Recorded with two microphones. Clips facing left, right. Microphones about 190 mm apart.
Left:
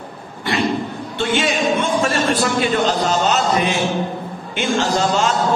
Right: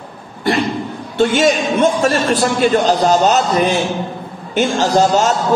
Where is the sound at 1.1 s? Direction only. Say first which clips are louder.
Right 7 dB; 45° right (ahead or behind).